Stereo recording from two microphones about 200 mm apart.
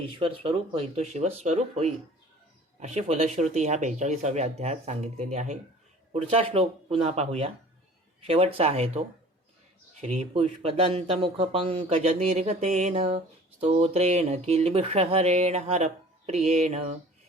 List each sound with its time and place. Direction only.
0.2 s speech: 25° right (ahead or behind)
10.0 s speech: 35° right (ahead or behind)